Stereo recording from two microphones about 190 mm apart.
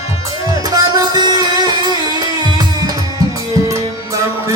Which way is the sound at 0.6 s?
20° right (ahead or behind).